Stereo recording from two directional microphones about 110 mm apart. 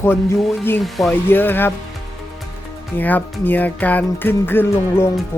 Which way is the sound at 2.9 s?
15° left (ahead or behind).